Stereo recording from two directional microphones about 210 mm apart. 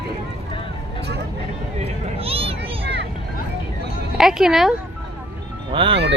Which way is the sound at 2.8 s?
55° right (ahead or behind).